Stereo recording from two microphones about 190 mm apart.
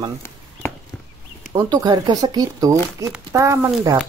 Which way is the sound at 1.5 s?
20° right (ahead or behind).